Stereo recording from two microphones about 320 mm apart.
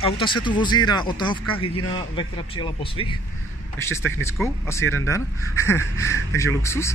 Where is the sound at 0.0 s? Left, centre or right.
Centre.